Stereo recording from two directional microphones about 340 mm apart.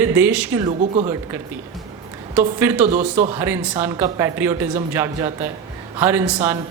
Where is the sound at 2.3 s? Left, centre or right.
Centre.